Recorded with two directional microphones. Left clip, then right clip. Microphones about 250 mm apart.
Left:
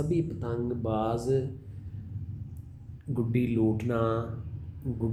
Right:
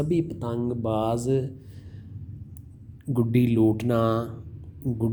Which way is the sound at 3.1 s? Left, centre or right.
Right.